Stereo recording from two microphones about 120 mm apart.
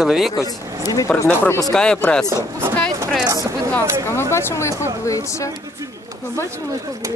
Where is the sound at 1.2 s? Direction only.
20° left (ahead or behind).